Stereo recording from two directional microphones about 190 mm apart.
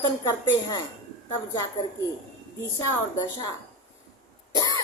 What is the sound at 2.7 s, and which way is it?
Speech, 20° left (ahead or behind).